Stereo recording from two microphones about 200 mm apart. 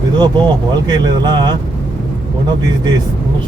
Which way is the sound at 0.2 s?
20° right (ahead or behind).